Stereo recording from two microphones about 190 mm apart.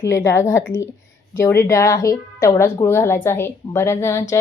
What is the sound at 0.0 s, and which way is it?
Speech, 15° left (ahead or behind).